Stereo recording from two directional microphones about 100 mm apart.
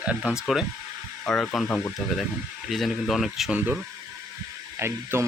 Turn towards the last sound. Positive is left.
turn(degrees=-25)  # may be behind; listen again after turning